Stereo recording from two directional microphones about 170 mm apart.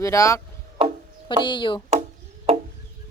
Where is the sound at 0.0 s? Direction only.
20° left (ahead or behind).